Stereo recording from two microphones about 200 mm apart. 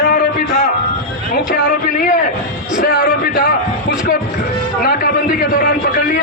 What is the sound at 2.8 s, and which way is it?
A man's voice, 45° left (ahead or behind).